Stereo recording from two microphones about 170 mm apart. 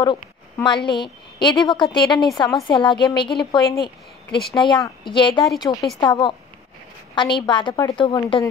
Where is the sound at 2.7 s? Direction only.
25° left (ahead or behind).